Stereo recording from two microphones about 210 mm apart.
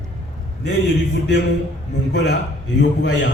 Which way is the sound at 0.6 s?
55° left (ahead or behind).